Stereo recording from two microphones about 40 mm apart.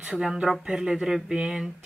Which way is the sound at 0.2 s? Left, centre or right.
Centre.